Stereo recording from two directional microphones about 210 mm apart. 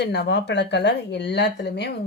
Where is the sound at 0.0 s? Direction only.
55° left (ahead or behind).